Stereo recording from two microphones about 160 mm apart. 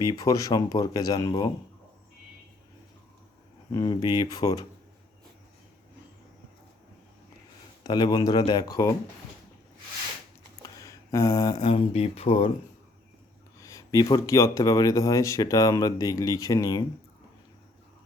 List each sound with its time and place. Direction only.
0.0 s speech: 25° left (ahead or behind)
3.7 s speech: 25° left (ahead or behind)
7.9 s speech: 25° left (ahead or behind)
10.6 s a sound: 20° left (ahead or behind)
11.5 s speech: 35° left (ahead or behind)
13.6 s speech: 20° left (ahead or behind)